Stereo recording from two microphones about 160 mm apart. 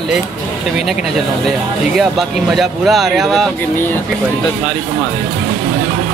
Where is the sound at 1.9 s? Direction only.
Centre (ahead or behind).